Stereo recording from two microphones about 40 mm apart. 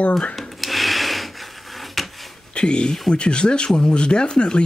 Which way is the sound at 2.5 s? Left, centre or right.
Left.